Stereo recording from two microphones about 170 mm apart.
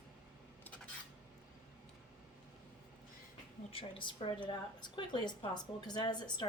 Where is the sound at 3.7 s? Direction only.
30° left (ahead or behind).